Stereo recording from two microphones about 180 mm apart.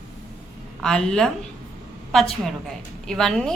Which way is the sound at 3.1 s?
Centre (ahead or behind).